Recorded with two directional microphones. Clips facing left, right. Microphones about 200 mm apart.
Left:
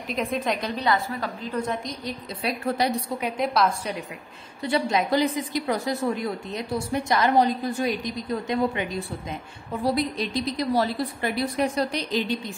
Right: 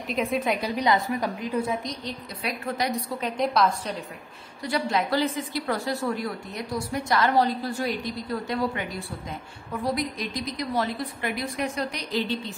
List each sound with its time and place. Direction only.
0.1 s a woman's voice: 5° right (ahead or behind)
2.4 s a woman's voice: 30° left (ahead or behind)
3.2 s a woman's voice: 5° left (ahead or behind)
4.6 s a woman's voice: 20° left (ahead or behind)
12.1 s speech: 15° left (ahead or behind)